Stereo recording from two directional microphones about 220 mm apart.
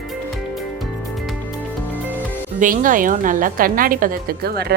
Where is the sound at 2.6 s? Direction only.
35° right (ahead or behind).